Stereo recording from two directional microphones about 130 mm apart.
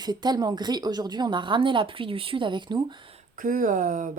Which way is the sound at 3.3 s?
90° right.